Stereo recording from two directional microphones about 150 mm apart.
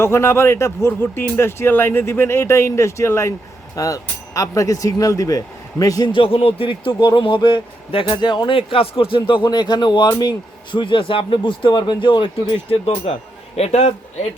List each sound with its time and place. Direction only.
0.0 s a man's voice: 15° left (ahead or behind); by 13.9 s 45° left (ahead or behind)